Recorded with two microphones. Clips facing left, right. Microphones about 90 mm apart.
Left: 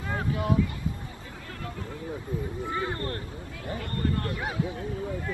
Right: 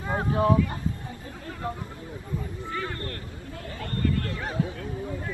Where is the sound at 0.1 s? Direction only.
35° right (ahead or behind).